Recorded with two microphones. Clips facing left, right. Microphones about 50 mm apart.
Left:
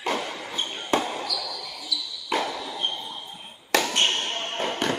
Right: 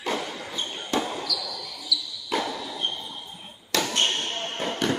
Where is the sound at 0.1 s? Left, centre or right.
Centre.